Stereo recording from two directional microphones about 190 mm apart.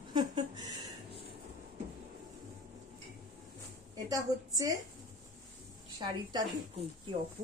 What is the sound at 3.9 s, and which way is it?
Speech, 20° right (ahead or behind).